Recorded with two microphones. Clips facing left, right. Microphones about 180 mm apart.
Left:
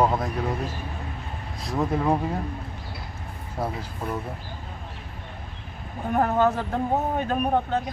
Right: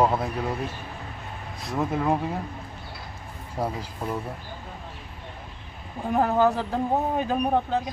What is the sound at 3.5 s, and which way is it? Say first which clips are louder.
Speech: right 1 dB; 10° right (ahead or behind).